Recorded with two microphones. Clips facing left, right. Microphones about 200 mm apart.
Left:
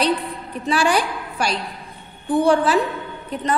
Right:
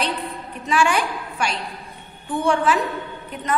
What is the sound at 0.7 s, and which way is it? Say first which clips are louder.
A woman's voice: left 1 dB; 35° left (ahead or behind).